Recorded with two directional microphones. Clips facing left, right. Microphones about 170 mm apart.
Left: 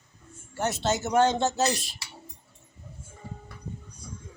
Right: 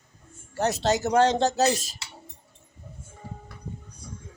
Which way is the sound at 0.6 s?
35° right (ahead or behind).